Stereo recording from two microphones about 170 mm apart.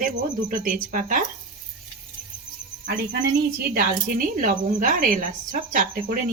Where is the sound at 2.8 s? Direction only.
85° right; by 6.1 s 50° right (ahead or behind).